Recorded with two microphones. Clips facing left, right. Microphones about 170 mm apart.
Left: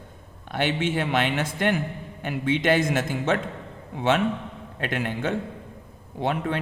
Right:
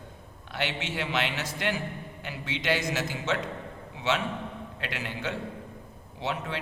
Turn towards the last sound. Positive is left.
turn(degrees=50)  # may be behind; listen again after turning